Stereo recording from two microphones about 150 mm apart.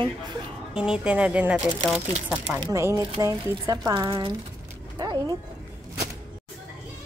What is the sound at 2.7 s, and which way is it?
Speech, 20° right (ahead or behind).